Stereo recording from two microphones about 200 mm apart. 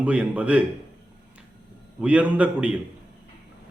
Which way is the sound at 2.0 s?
5° right (ahead or behind).